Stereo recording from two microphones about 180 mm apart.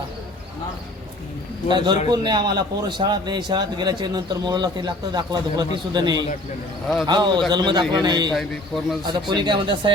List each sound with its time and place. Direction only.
1.7 s a man's voice: 25° right (ahead or behind)
8.3 s a man's voice: centre (ahead or behind)
9.0 s a man's voice: 25° right (ahead or behind)